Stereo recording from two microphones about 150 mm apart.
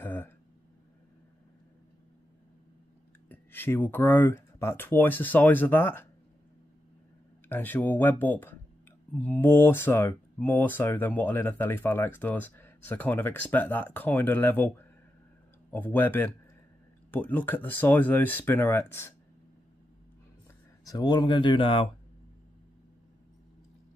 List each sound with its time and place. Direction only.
0.0 s a sound: 15° left (ahead or behind)
3.3 s speech: 15° left (ahead or behind)
7.4 s speech: 15° left (ahead or behind)
20.8 s speech: 25° left (ahead or behind)